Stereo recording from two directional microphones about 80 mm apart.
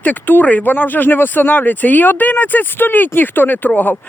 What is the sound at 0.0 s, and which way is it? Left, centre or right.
Speech, left.